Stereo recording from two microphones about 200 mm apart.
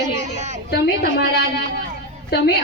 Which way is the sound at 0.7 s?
55° left (ahead or behind).